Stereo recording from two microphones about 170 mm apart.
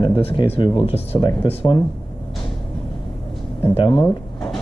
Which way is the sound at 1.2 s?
25° left (ahead or behind).